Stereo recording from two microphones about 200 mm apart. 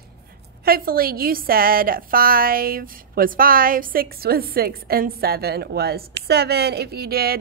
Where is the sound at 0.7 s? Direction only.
50° right (ahead or behind).